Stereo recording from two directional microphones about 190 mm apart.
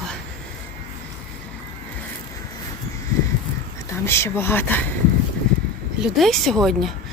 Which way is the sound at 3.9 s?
15° left (ahead or behind).